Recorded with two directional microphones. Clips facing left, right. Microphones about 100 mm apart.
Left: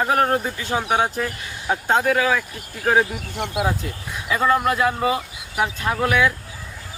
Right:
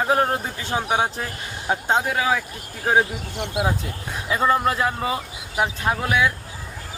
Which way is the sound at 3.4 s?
25° right (ahead or behind).